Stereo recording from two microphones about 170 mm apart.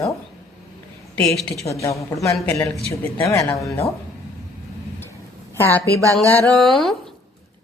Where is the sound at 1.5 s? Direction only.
20° left (ahead or behind).